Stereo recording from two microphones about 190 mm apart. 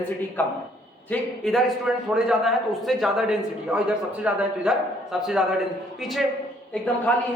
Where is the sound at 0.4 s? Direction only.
10° left (ahead or behind).